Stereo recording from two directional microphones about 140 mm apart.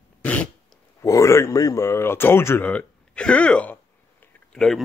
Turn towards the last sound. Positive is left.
turn(degrees=5)  # may be behind; listen again after turning